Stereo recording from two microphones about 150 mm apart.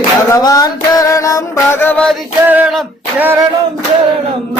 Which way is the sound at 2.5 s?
10° right (ahead or behind).